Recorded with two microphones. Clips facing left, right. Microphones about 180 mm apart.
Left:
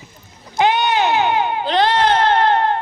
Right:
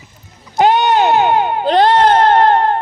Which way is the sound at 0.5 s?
40° right (ahead or behind).